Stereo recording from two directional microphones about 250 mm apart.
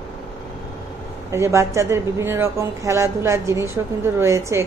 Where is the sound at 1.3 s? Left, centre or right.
Centre.